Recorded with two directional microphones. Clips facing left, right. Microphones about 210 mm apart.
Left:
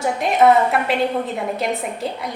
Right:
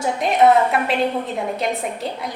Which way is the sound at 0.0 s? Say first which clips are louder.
Even; centre (ahead or behind).